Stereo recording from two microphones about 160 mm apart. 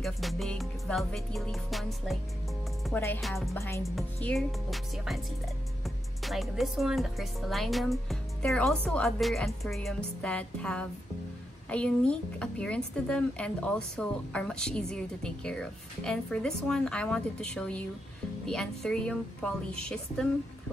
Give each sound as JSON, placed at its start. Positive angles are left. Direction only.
{"t": 0.0, "sound": "speech", "side_deg": 0}
{"t": 2.8, "sound": "music", "side_deg": 0}
{"t": 3.2, "sound": "speech", "side_deg": 0}
{"t": 3.5, "sound": "music", "side_deg": 15}
{"t": 3.8, "sound": "speech", "side_deg": 0}